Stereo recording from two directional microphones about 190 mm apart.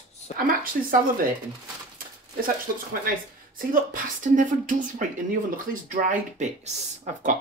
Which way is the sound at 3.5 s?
45° right (ahead or behind).